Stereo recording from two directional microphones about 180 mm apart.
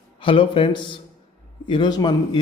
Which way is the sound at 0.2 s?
30° left (ahead or behind).